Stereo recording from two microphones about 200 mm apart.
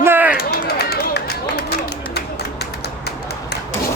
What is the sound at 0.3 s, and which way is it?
Run, 55° left (ahead or behind).